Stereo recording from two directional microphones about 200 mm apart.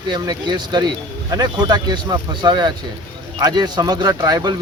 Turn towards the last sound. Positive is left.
turn(degrees=-20)  # may be behind; listen again after turning